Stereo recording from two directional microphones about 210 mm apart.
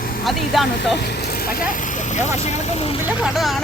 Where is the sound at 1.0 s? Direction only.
50° left (ahead or behind); by 3.0 s 30° left (ahead or behind).